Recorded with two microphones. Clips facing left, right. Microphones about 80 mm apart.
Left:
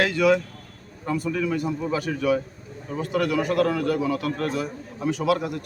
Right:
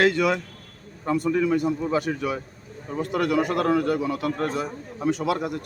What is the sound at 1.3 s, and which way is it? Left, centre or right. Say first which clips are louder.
Speech: right 4 dB; right.